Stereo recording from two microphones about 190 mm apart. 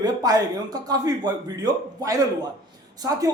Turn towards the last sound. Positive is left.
turn(degrees=-20)  # may be behind; listen again after turning